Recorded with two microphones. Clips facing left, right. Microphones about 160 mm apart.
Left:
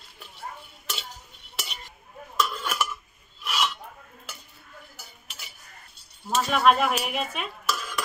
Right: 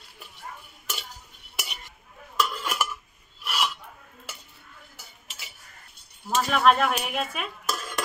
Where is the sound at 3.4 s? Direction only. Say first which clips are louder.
Left 1 dB; 5° right (ahead or behind).